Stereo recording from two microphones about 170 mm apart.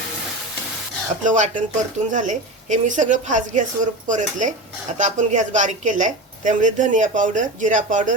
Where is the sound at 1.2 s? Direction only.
45° right (ahead or behind).